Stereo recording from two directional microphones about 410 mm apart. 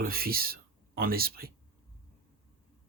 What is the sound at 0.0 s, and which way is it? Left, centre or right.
Speech, right.